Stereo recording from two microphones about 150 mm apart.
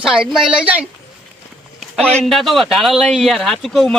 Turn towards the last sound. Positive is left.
turn(degrees=0)  # may be behind; listen again after turning